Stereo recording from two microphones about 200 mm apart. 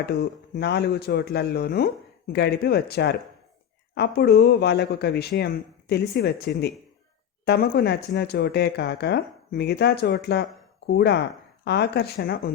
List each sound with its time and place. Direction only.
0.0 s speech: 55° left (ahead or behind)